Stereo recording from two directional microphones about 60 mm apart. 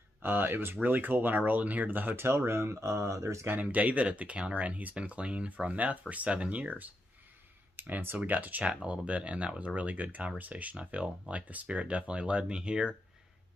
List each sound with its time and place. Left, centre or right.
0.2 s speech: right
2.2 s speech: right
3.5 s speech: right